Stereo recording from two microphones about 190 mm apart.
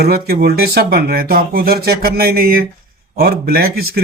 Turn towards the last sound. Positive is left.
turn(degrees=-55)  # may be behind; listen again after turning